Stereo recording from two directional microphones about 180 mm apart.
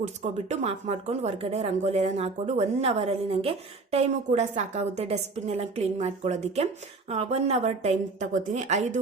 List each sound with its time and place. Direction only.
0.2 s speech: 40° right (ahead or behind)